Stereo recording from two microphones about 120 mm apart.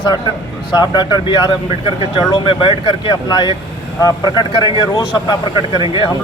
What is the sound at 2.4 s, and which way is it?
Speech, 45° left (ahead or behind).